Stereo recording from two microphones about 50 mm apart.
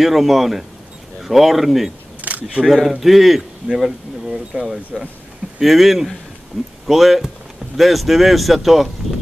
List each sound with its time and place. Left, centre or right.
0.0 s speech: centre
2.2 s single-lens reflex camera: right
2.7 s speech: centre